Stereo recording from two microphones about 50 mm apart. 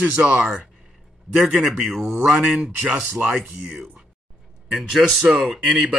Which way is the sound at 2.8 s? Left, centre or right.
Right.